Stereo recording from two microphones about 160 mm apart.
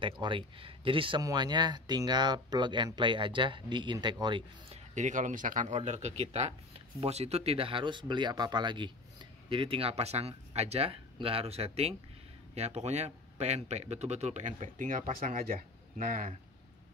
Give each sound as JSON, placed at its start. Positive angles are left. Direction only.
{"t": 0.0, "sound": "speech", "side_deg": -30}
{"t": 4.9, "sound": "speech", "side_deg": -50}